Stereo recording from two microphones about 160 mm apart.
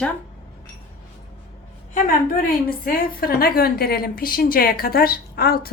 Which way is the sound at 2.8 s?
70° left (ahead or behind).